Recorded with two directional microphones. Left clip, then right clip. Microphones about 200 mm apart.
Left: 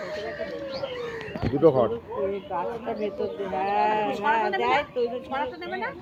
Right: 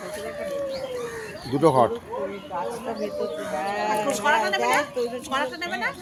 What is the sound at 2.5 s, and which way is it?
Speech, 35° left (ahead or behind).